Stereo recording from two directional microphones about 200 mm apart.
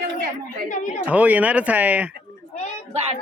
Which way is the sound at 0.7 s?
40° left (ahead or behind).